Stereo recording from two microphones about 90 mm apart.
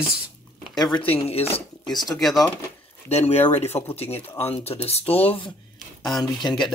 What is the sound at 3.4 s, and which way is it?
Speech, 25° left (ahead or behind).